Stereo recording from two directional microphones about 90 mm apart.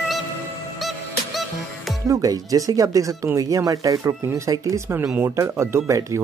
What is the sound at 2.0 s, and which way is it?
Speech, 40° right (ahead or behind).